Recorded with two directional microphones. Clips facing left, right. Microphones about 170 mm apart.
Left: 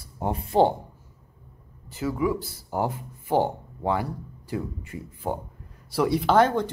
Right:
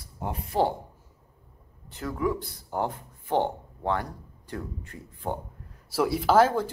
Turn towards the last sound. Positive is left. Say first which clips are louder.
# left 1 dB
turn(degrees=-5)  # may be behind; listen again after turning